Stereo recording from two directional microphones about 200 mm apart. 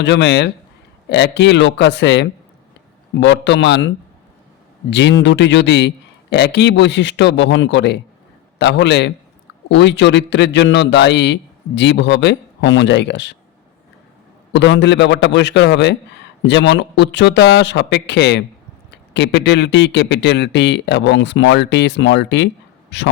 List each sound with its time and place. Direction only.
0.0 s a man's voice: 60° left (ahead or behind)
14.5 s a man's voice: 65° left (ahead or behind)